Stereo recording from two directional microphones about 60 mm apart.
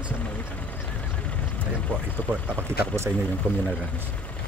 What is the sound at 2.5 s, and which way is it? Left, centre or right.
Speech, right.